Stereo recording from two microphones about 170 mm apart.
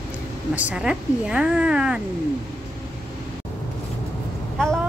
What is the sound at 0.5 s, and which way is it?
A woman's voice, 5° right (ahead or behind).